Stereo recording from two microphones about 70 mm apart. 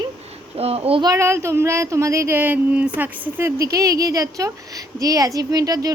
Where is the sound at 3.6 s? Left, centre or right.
Right.